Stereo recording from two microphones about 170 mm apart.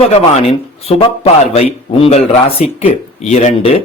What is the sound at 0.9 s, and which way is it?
Speech, 35° left (ahead or behind).